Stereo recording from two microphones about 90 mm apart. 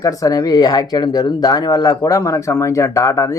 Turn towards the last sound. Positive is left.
turn(degrees=35)  # may be behind; listen again after turning